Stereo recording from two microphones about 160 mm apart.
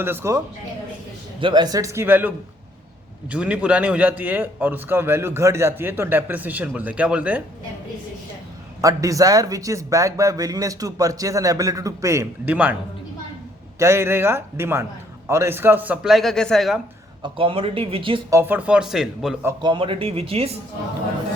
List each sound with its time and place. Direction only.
0.0 s a man's voice: 15° right (ahead or behind)
1.4 s a man's voice: 30° right (ahead or behind); by 7.4 s 10° right (ahead or behind)
8.8 s speech: 20° right (ahead or behind)
13.7 s a man's voice: 15° right (ahead or behind); by 16.8 s centre (ahead or behind)
17.2 s speech: 35° right (ahead or behind)
18.3 s a man's voice: 15° right (ahead or behind)
19.6 s speech: 30° right (ahead or behind)